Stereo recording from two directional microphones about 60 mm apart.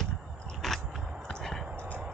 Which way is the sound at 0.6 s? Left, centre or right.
Centre.